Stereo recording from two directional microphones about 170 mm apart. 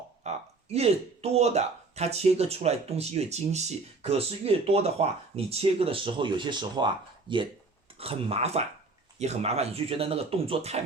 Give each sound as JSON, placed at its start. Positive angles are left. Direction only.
{"t": 0.3, "sound": "speech", "side_deg": -40}